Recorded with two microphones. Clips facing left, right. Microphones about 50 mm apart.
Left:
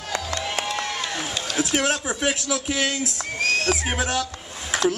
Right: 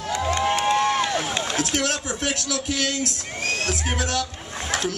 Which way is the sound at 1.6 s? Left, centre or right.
Centre.